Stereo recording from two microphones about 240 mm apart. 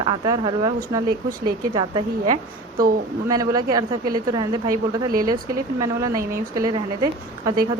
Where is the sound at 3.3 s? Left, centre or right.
Centre.